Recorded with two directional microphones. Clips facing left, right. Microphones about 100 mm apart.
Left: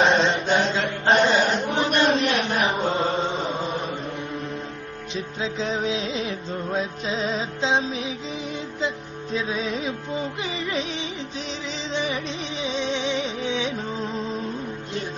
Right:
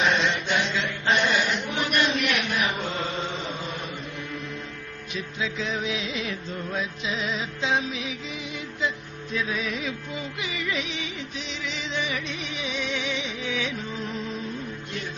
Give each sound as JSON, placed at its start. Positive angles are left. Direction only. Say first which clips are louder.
{"t": 0.0, "sound": "chant", "louder": "left 5 dB", "side_deg": 35}
{"t": 5.1, "sound": "music", "louder": "left 2 dB", "side_deg": 35}